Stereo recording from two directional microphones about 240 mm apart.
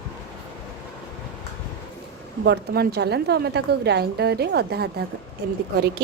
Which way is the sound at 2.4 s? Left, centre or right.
Right.